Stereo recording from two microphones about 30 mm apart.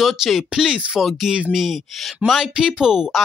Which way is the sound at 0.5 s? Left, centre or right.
Right.